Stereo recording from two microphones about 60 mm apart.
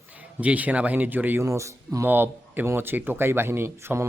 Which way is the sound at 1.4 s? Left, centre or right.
Right.